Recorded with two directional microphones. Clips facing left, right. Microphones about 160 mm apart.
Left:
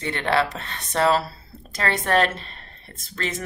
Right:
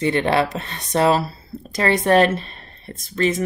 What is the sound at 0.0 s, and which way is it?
Speech, 15° right (ahead or behind).